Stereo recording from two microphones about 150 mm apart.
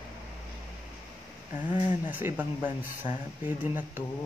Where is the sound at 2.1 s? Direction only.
10° right (ahead or behind).